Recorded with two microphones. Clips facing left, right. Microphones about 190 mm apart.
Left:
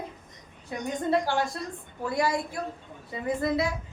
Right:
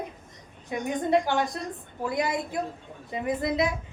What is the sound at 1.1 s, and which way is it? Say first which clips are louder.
A woman's voice: right 1 dB; 20° right (ahead or behind).